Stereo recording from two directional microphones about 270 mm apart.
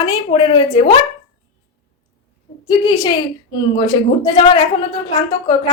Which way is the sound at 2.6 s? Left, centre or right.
Centre.